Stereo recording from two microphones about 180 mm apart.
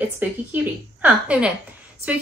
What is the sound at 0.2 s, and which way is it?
A woman's voice, 10° right (ahead or behind).